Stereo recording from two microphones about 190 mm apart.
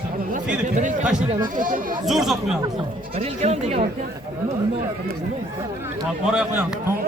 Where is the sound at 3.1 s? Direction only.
35° right (ahead or behind).